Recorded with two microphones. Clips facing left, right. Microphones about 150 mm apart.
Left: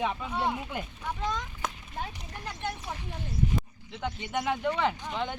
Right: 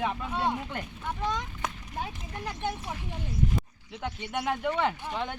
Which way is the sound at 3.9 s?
5° right (ahead or behind).